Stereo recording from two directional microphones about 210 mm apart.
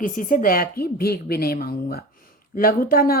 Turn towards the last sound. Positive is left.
turn(degrees=45)  # may be behind; listen again after turning